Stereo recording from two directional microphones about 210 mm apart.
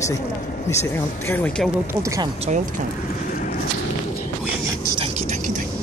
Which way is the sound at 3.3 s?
40° left (ahead or behind).